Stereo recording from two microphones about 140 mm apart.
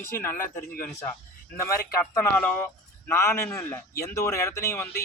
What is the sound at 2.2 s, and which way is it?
A man's voice, 15° left (ahead or behind).